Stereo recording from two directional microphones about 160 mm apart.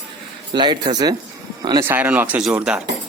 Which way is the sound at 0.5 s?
25° right (ahead or behind).